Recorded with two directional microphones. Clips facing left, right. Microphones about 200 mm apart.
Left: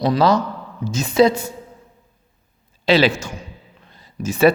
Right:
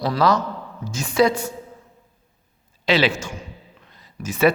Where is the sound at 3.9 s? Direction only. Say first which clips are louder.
Left 5 dB; 30° left (ahead or behind).